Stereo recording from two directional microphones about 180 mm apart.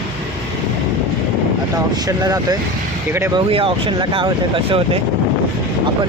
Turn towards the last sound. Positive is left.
turn(degrees=-30)  # may be behind; listen again after turning